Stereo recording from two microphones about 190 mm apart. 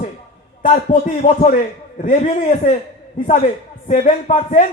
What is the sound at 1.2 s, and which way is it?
Speech, 40° left (ahead or behind).